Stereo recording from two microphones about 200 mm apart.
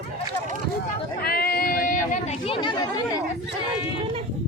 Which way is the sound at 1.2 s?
50° left (ahead or behind).